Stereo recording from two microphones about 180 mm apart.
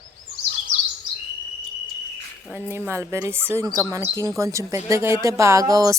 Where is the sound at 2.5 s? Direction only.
10° right (ahead or behind).